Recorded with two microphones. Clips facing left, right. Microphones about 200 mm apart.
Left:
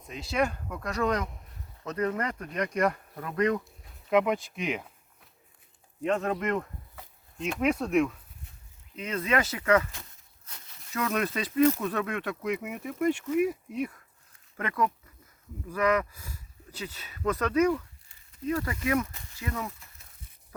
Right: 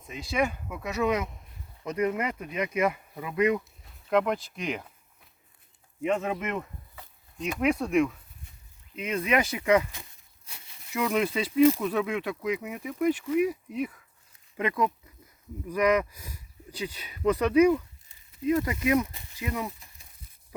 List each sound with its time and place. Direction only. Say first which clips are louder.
0.0 s speech: even; centre (ahead or behind)
4.1 s speech: left 1 dB; 5° left (ahead or behind)
6.0 s speech: even; 5° right (ahead or behind)
9.0 s speech: right 2 dB; 10° right (ahead or behind)
14.5 s speech: right 2 dB; 15° right (ahead or behind)